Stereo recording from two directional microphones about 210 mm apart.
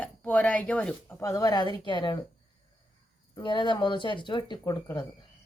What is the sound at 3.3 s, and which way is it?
Speech, 20° left (ahead or behind).